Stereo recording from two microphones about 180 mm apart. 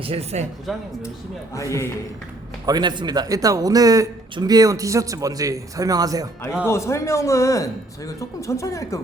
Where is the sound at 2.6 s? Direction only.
25° right (ahead or behind).